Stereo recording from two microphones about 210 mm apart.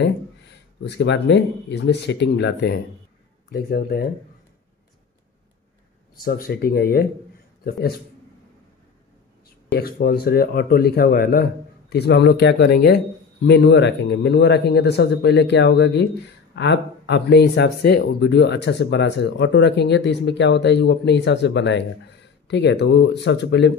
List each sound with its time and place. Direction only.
0.8 s speech: 55° left (ahead or behind)
6.2 s speech: 45° left (ahead or behind)
9.8 s speech: 45° left (ahead or behind)